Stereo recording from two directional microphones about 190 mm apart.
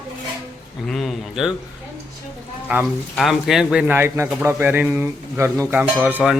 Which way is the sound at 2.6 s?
5° right (ahead or behind).